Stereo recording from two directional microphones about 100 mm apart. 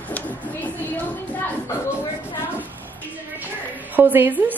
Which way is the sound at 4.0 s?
20° right (ahead or behind).